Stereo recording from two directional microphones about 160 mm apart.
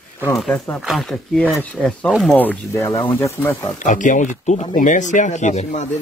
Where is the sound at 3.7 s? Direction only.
55° left (ahead or behind).